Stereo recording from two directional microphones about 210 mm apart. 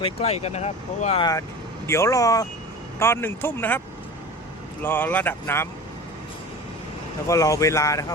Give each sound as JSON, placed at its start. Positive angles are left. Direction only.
{"t": 0.0, "sound": "speech", "side_deg": 30}
{"t": 4.8, "sound": "speech", "side_deg": 10}
{"t": 7.3, "sound": "speech", "side_deg": 15}